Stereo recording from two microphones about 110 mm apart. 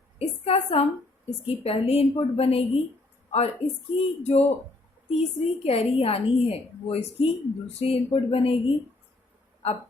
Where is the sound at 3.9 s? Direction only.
65° left (ahead or behind).